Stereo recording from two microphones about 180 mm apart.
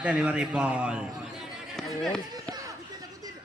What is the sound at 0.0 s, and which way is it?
A man's voice, 5° right (ahead or behind).